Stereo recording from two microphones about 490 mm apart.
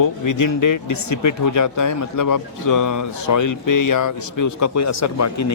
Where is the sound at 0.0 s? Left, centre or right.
Left.